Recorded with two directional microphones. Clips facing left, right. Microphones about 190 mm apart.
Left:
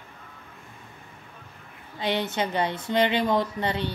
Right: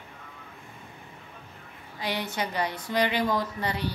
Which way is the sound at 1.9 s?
25° left (ahead or behind).